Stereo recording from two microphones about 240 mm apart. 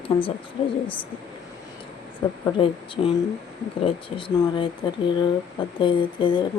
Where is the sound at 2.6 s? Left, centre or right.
Centre.